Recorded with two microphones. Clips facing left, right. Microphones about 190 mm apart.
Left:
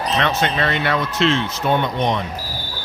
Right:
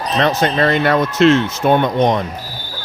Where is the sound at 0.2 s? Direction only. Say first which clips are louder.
Right 7 dB; 35° right (ahead or behind).